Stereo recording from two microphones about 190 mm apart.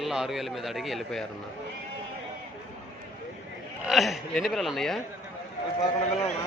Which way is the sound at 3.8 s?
Centre (ahead or behind).